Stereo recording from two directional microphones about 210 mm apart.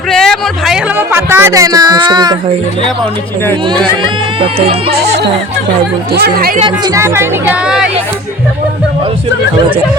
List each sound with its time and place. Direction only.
0.1 s speech: centre (ahead or behind); by 2.4 s 20° right (ahead or behind)
4.4 s speech: 25° right (ahead or behind)
5.0 s music: 50° right (ahead or behind)
6.1 s speech: 45° right (ahead or behind)
6.6 s speech: 20° right (ahead or behind); by 7.9 s 5° right (ahead or behind)